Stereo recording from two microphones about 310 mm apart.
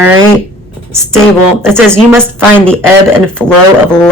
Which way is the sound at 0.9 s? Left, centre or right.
Centre.